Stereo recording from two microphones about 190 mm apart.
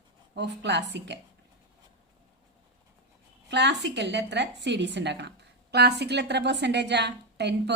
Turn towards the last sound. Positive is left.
turn(degrees=-65)  # may be behind; listen again after turning